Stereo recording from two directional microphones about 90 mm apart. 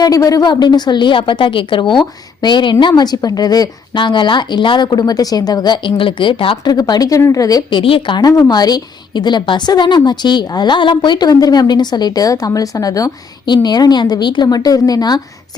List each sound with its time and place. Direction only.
0.0 s a woman's voice: 40° left (ahead or behind); by 2.7 s 60° left (ahead or behind)
2.8 s a woman's voice: 50° left (ahead or behind)
3.9 s a woman's voice: 60° left (ahead or behind)
4.9 s a woman's voice: 45° left (ahead or behind); by 6.7 s 70° left (ahead or behind)
6.7 s a woman's voice: 45° left (ahead or behind)
7.7 s a woman's voice: 75° left (ahead or behind)
8.2 s a woman's voice: 45° left (ahead or behind)